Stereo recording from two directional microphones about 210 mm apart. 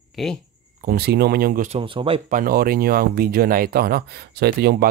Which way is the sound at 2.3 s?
45° right (ahead or behind).